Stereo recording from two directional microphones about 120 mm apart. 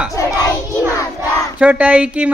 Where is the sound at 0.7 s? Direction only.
25° right (ahead or behind).